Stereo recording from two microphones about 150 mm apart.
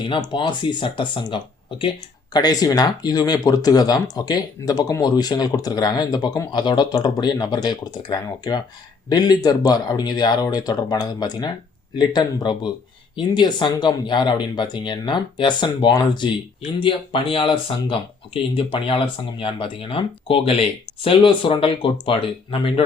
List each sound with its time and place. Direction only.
0.0 s speech: 30° left (ahead or behind)